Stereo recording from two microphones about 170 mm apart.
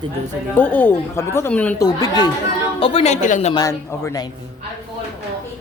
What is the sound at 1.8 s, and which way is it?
A woman's voice, 25° left (ahead or behind).